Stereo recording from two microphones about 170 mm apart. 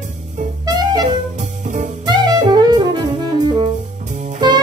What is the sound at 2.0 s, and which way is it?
Saxophone, 25° right (ahead or behind).